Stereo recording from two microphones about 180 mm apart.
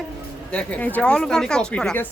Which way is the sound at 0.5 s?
10° left (ahead or behind).